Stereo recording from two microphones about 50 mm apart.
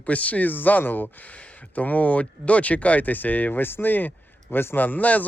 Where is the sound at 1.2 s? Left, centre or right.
Left.